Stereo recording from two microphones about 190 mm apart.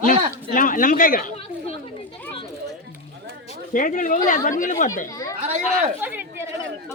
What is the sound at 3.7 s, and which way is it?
Speech, 45° left (ahead or behind).